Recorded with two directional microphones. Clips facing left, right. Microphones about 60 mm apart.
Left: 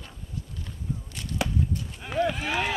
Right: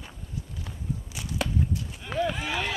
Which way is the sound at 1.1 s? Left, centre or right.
Centre.